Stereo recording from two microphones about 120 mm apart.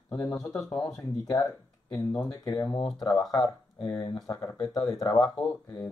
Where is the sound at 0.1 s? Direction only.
15° left (ahead or behind).